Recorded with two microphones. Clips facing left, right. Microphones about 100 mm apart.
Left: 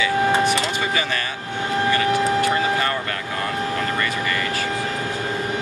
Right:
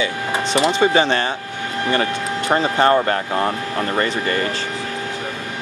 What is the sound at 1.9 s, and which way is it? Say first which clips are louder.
Speech: left 1 dB; 25° right (ahead or behind).